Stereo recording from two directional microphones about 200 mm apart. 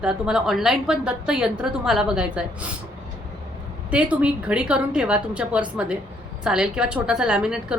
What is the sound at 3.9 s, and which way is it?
A woman's voice, 5° right (ahead or behind).